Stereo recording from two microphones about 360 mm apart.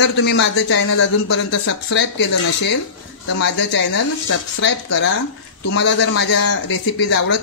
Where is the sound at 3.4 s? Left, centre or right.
Left.